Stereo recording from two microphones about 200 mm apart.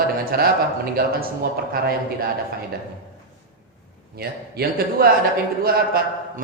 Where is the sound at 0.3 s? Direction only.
50° right (ahead or behind).